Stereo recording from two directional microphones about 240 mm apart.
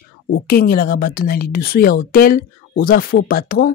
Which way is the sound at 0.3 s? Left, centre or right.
Left.